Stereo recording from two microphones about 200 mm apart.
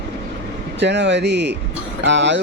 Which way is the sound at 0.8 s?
60° right (ahead or behind).